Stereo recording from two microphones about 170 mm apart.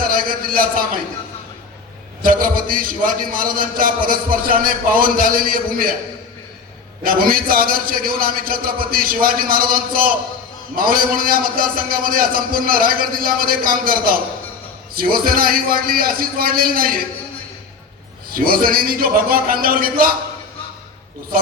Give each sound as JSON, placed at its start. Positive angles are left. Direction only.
{"t": 0.0, "sound": "a man's voice", "side_deg": -55}
{"t": 2.2, "sound": "a man's voice", "side_deg": -55}
{"t": 7.0, "sound": "a man's voice", "side_deg": -60}
{"t": 18.3, "sound": "a man's voice", "side_deg": -55}